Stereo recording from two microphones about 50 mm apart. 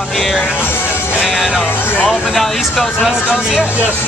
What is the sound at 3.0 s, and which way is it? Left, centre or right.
Speech, centre.